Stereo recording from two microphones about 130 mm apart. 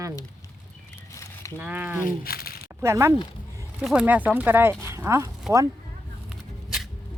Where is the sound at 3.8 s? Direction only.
10° right (ahead or behind).